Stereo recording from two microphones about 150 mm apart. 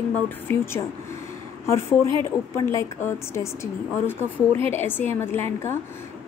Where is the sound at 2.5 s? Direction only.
20° left (ahead or behind).